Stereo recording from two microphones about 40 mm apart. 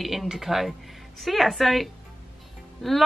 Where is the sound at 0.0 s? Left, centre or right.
Centre.